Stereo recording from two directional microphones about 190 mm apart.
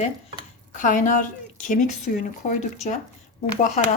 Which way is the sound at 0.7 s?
45° left (ahead or behind).